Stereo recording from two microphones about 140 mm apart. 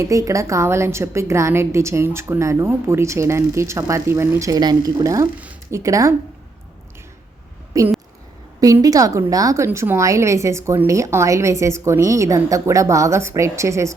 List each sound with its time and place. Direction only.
0.0 s a woman's voice: 20° right (ahead or behind)
5.4 s a sound: 10° right (ahead or behind)
5.8 s a woman's voice: 25° right (ahead or behind)
7.7 s a woman's voice: 25° right (ahead or behind)